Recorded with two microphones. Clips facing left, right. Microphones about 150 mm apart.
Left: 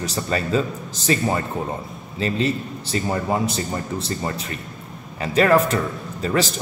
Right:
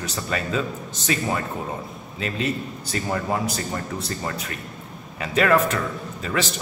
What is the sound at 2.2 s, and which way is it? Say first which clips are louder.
A man's voice: left 4 dB; 30° left (ahead or behind).